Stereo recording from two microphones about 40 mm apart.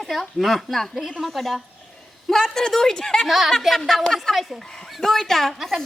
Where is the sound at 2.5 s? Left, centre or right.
Centre.